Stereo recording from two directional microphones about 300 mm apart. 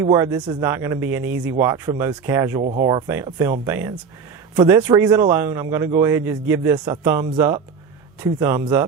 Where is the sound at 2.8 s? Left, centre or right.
Centre.